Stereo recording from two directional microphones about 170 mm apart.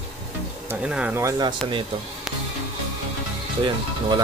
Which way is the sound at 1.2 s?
20° right (ahead or behind).